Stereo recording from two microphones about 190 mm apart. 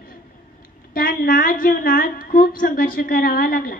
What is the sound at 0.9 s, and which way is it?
A woman's voice, 50° left (ahead or behind).